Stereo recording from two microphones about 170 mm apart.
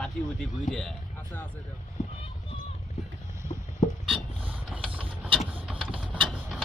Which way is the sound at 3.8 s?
45° left (ahead or behind).